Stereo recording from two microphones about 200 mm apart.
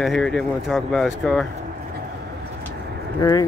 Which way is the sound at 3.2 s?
20° left (ahead or behind).